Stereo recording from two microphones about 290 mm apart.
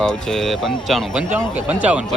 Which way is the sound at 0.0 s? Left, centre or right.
Centre.